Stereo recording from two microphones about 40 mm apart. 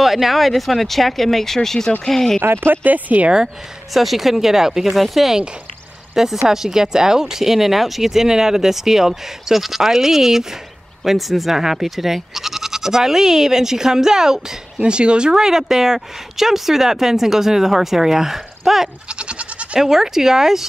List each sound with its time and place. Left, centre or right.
0.0 s speech: centre
2.4 s speech: right
2.8 s speech: right
3.9 s a woman's voice: centre
14.8 s a woman's voice: right; by 18.9 s centre
19.0 s goat: right
19.8 s a woman's voice: centre